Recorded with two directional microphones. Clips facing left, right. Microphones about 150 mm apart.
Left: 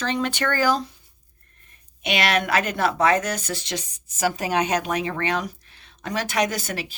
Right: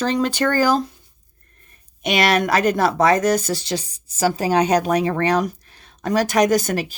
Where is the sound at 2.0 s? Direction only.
40° right (ahead or behind).